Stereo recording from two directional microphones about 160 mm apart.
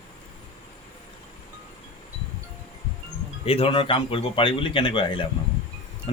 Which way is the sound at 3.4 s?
35° left (ahead or behind).